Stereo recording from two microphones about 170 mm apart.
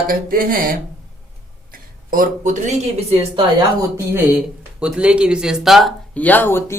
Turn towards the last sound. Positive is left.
turn(degrees=15)  # may be behind; listen again after turning